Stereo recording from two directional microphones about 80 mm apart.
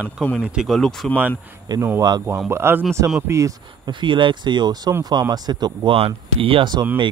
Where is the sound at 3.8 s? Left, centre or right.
Right.